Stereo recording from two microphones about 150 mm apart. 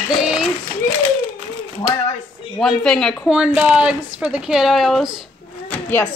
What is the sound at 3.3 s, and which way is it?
A woman's voice, 5° right (ahead or behind).